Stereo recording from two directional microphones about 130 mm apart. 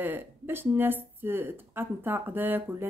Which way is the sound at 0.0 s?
15° right (ahead or behind).